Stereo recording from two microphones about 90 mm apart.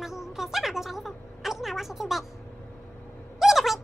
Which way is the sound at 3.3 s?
Centre (ahead or behind).